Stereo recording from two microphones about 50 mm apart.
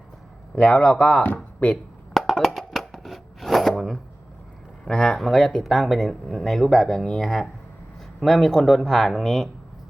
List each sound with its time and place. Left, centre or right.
0.5 s a man's voice: centre
1.7 s a sound: centre
2.6 s chopping: centre
4.9 s speech: centre